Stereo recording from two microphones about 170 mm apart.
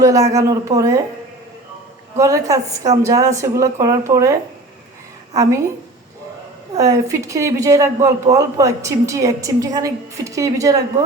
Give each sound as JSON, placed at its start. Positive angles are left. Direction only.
{"t": 0.0, "sound": "a woman's voice", "side_deg": -20}
{"t": 2.1, "sound": "a woman's voice", "side_deg": -20}
{"t": 6.7, "sound": "a woman's voice", "side_deg": -20}